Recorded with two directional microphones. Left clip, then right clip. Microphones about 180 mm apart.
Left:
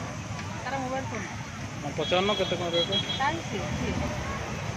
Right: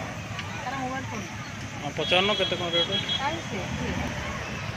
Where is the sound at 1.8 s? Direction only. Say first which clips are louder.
Right 3 dB; centre (ahead or behind).